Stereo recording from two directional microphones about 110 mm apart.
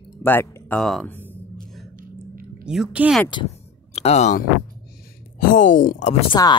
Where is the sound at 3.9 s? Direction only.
75° left (ahead or behind).